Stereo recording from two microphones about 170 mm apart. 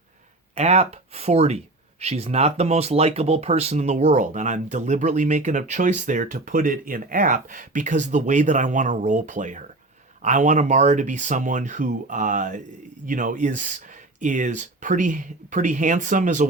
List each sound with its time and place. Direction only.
0.5 s speech: 40° right (ahead or behind)